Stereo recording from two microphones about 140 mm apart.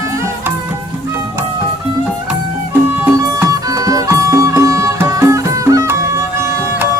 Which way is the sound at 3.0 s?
25° right (ahead or behind).